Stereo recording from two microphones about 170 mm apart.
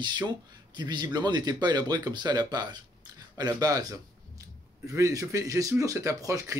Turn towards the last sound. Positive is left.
turn(degrees=-20)  # may be behind; listen again after turning